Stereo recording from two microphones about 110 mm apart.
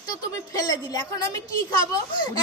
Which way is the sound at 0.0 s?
30° left (ahead or behind).